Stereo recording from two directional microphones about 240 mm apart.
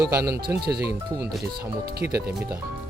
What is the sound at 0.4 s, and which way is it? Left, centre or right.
Speech, right.